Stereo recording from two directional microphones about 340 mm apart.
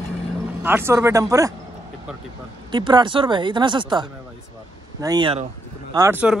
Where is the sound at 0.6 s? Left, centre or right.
Centre.